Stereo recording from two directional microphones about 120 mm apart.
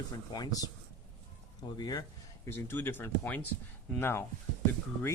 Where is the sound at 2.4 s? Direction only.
20° left (ahead or behind).